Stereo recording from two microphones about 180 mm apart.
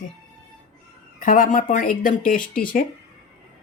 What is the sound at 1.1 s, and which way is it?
Speech, 45° left (ahead or behind).